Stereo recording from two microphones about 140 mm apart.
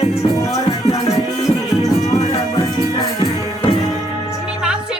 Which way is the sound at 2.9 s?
35° left (ahead or behind).